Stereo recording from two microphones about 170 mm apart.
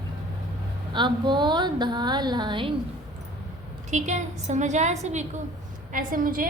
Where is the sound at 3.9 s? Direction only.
45° right (ahead or behind).